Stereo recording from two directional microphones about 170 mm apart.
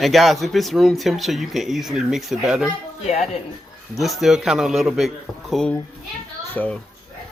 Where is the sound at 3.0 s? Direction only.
40° left (ahead or behind).